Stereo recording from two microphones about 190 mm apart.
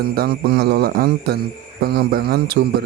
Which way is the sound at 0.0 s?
55° right (ahead or behind).